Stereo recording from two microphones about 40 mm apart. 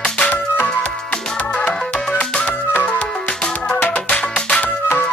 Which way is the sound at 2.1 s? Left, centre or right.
Left.